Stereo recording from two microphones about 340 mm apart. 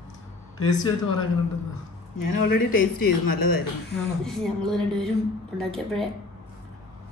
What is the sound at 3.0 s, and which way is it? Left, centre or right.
Speech, left.